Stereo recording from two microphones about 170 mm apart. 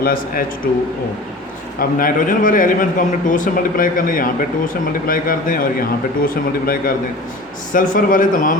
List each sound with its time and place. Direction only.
0.0 s a man's voice: 60° left (ahead or behind)